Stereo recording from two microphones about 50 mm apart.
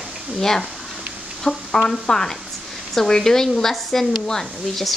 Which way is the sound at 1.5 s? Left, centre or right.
Centre.